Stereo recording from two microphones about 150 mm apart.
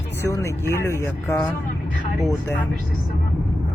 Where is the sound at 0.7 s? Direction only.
15° left (ahead or behind).